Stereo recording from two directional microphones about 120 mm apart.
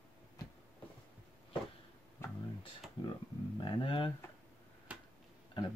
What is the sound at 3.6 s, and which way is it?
Speech, 45° left (ahead or behind).